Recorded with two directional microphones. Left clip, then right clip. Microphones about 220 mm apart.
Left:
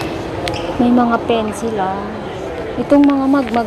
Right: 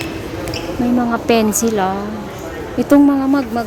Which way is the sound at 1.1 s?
15° right (ahead or behind).